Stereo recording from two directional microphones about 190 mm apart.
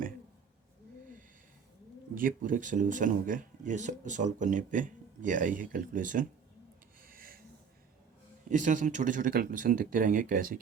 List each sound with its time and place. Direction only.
2.1 s speech: 45° right (ahead or behind)
7.1 s snort: 50° right (ahead or behind)
8.4 s speech: 40° right (ahead or behind)